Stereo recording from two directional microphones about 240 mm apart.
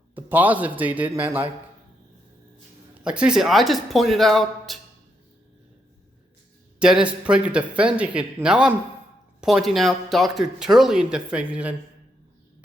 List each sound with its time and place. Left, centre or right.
0.1 s a man's voice: centre
3.0 s speech: centre
6.7 s speech: centre